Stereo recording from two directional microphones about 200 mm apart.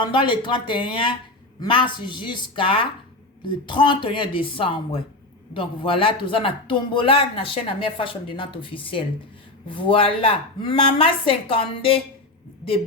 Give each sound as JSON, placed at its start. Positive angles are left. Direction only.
{"t": 0.0, "sound": "speech", "side_deg": 25}